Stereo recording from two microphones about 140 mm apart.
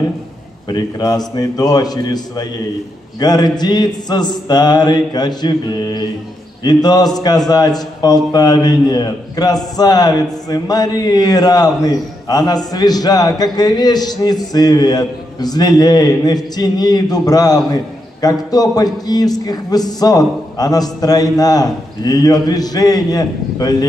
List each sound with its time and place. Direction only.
0.7 s speech: 30° left (ahead or behind)